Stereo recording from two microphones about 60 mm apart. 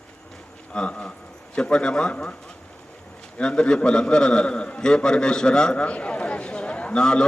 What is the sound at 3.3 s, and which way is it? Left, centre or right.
A man's voice, centre.